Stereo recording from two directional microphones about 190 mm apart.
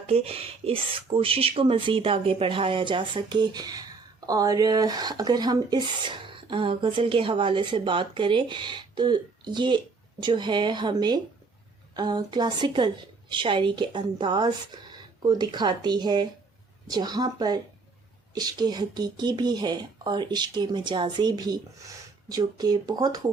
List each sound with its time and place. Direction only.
0.1 s speech: 30° right (ahead or behind)